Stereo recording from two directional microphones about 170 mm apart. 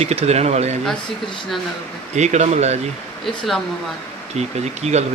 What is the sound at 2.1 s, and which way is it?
Speech, 40° right (ahead or behind).